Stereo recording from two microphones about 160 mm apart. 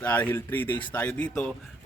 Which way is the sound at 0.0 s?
10° left (ahead or behind).